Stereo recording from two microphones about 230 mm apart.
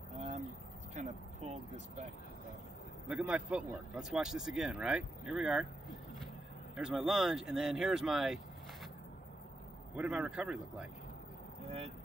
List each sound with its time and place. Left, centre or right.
0.1 s a sound: right
0.9 s speech: right
3.1 s speech: centre
9.9 s speech: centre